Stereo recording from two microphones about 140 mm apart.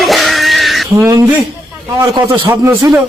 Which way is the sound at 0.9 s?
20° right (ahead or behind).